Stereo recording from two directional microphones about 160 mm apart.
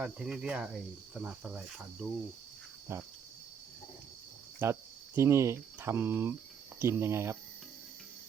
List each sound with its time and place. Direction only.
0.0 s speech: 5° right (ahead or behind)
4.6 s speech: 15° right (ahead or behind)